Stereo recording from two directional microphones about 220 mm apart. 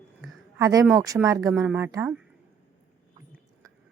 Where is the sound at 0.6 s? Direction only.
15° right (ahead or behind).